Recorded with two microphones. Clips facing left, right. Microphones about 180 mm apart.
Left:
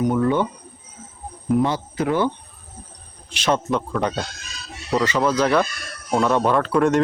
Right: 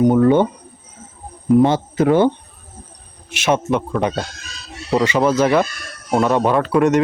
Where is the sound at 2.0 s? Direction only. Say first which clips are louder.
Right 7 dB; 25° right (ahead or behind).